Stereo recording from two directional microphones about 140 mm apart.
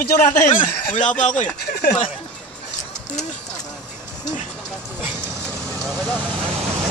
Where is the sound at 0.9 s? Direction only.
60° left (ahead or behind).